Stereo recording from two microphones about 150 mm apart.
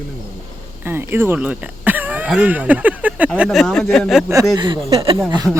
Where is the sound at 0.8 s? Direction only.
15° right (ahead or behind); by 4.2 s 5° left (ahead or behind).